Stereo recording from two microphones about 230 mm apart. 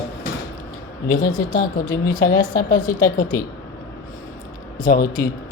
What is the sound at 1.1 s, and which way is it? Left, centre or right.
Speech, left.